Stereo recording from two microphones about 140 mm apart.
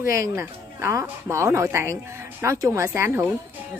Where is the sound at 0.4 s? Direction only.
20° right (ahead or behind).